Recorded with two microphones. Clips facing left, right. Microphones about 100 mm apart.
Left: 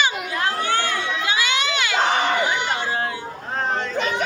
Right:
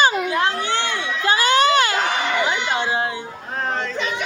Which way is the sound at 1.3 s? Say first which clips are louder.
Right 10 dB; 45° right (ahead or behind).